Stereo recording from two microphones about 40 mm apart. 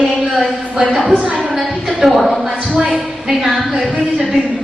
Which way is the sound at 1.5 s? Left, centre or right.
Centre.